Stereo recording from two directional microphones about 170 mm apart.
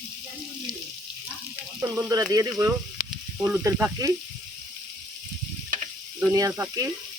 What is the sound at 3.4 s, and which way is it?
Speech, 10° right (ahead or behind).